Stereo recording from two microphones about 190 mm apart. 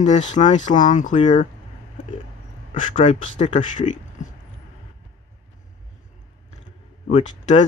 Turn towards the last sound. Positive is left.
turn(degrees=35)  # may be behind; listen again after turning